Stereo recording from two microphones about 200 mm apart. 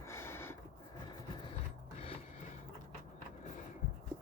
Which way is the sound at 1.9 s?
30° left (ahead or behind).